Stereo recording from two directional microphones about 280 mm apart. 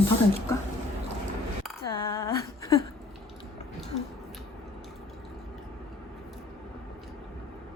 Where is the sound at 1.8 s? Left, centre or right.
Centre.